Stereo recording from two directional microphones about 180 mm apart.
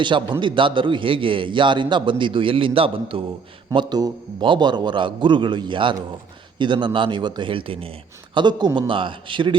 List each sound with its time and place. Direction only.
0.0 s a man's voice: 25° right (ahead or behind)